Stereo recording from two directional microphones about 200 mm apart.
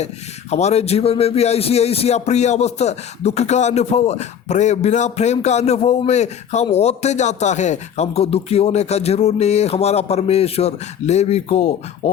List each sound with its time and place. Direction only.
0.5 s speech: 35° left (ahead or behind)